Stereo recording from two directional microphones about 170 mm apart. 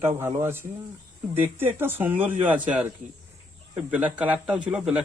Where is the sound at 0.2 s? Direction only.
15° right (ahead or behind).